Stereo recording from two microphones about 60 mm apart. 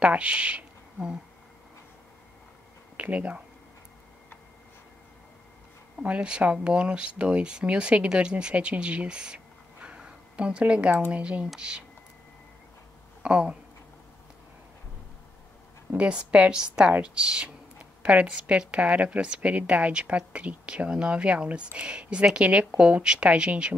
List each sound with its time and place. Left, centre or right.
0.0 s speech: right
3.0 s speech: right
6.0 s speech: centre
13.2 s speech: centre
16.0 s speech: centre